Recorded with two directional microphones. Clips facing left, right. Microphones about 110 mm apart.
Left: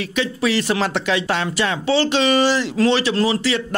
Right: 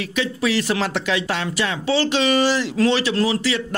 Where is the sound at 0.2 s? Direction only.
35° left (ahead or behind).